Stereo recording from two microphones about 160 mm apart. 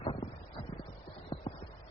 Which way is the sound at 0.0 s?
35° left (ahead or behind).